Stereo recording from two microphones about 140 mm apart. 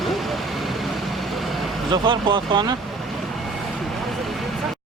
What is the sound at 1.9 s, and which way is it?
Speech, 35° right (ahead or behind).